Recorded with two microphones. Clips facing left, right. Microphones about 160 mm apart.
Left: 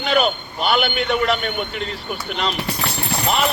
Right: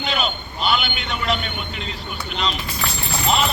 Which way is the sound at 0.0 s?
55° left (ahead or behind).